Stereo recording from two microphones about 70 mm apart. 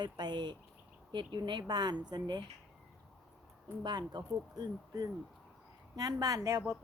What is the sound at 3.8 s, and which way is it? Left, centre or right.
A woman's voice, right.